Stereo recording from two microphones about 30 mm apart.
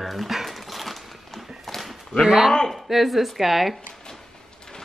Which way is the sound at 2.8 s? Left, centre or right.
Centre.